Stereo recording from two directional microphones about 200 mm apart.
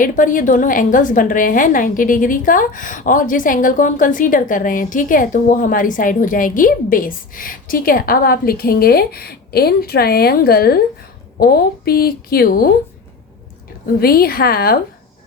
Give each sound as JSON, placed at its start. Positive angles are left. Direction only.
{"t": 0.0, "sound": "a woman's voice", "side_deg": 40}
{"t": 14.0, "sound": "a woman's voice", "side_deg": 50}